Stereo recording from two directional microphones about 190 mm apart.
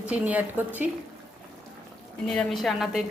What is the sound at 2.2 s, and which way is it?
Speech, 5° left (ahead or behind).